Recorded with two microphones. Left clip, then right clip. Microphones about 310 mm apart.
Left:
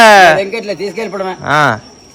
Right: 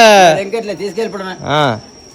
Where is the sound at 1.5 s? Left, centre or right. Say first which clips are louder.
Left 3 dB; centre.